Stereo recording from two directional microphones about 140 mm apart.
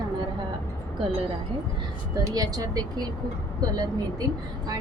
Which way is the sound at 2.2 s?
25° right (ahead or behind).